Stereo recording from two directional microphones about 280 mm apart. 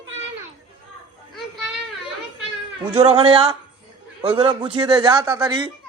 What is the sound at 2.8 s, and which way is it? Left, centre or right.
A man's voice, centre.